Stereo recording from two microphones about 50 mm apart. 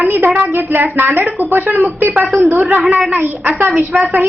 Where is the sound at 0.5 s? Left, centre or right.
Right.